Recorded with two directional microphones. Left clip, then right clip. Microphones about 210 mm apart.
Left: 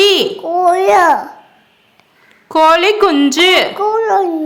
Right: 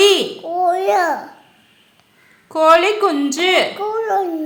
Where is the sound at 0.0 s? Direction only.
20° left (ahead or behind).